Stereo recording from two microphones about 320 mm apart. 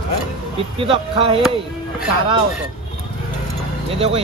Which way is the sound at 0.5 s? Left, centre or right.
Centre.